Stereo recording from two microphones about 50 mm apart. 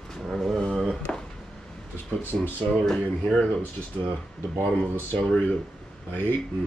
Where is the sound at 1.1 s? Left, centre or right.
Centre.